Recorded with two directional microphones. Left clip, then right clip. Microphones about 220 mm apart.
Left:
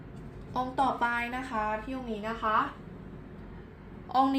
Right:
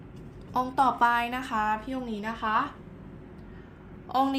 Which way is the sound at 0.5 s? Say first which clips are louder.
Right 4 dB; 25° right (ahead or behind).